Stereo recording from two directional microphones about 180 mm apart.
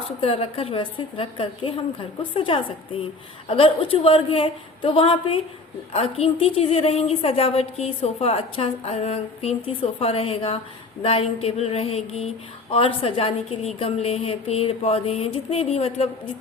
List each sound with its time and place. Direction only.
0.2 s a woman's voice: 30° left (ahead or behind)